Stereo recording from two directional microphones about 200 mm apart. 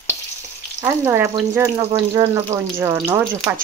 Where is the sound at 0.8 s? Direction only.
10° right (ahead or behind).